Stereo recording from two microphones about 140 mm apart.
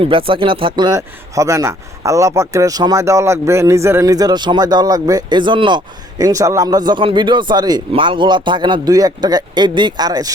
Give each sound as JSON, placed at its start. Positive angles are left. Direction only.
{"t": 0.0, "sound": "speech", "side_deg": -40}